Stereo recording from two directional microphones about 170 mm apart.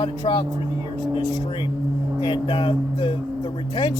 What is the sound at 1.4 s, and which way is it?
Speech, 30° left (ahead or behind).